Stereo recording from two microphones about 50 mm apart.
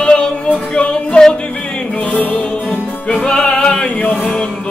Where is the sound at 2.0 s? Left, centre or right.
Left.